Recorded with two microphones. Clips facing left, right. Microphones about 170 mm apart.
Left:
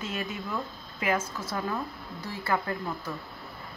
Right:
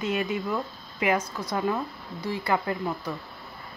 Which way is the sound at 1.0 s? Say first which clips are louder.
Right 3 dB; 15° right (ahead or behind).